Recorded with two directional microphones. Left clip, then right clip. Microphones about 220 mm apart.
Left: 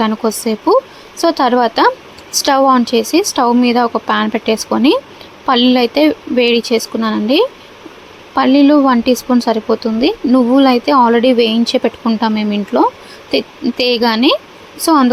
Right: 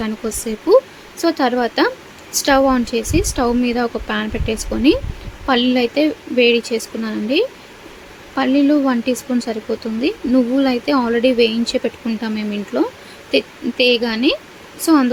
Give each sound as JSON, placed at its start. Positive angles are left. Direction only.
{"t": 0.0, "sound": "speech", "side_deg": 10}